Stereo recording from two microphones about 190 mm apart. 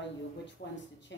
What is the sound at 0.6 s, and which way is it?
Speech, 50° left (ahead or behind).